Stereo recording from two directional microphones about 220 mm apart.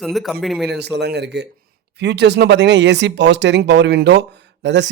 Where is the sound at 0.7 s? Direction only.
50° right (ahead or behind).